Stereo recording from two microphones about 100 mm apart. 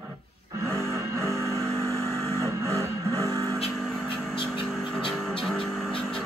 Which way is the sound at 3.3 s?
30° right (ahead or behind).